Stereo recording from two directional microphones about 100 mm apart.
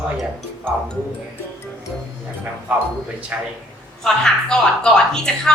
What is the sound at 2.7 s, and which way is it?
Speech, 10° right (ahead or behind).